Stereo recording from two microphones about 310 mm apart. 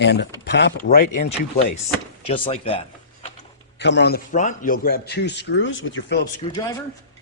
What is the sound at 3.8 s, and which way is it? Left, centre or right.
A man's voice, left.